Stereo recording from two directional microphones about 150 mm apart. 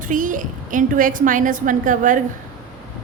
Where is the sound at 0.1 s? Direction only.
60° right (ahead or behind).